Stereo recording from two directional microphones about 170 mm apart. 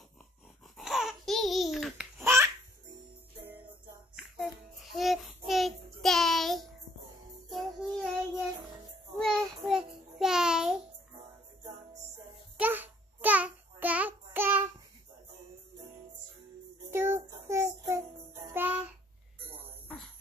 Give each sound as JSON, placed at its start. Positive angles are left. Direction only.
{"t": 0.7, "sound": "babbling", "side_deg": 0}
{"t": 2.1, "sound": "baby laughter", "side_deg": -15}
{"t": 4.9, "sound": "child singing", "side_deg": 0}
{"t": 12.5, "sound": "a sound", "side_deg": -10}
{"t": 16.9, "sound": "child singing", "side_deg": -15}